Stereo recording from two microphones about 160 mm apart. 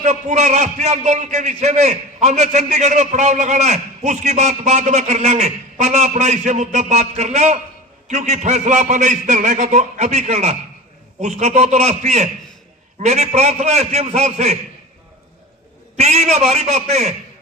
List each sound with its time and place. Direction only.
0.0 s a man's voice: 45° right (ahead or behind)
16.0 s a man's voice: 45° right (ahead or behind)